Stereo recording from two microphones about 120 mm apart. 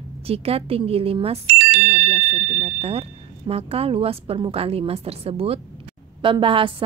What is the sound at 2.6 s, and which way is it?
A woman's voice, 55° right (ahead or behind).